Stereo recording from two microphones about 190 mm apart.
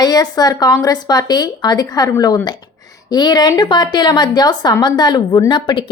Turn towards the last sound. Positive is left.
turn(degrees=25)  # may be behind; listen again after turning